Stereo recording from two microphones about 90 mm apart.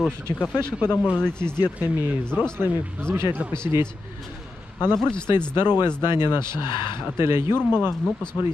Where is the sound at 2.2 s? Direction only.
10° left (ahead or behind).